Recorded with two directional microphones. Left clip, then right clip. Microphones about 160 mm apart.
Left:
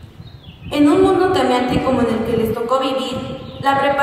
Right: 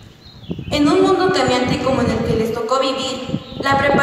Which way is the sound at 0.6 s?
30° right (ahead or behind).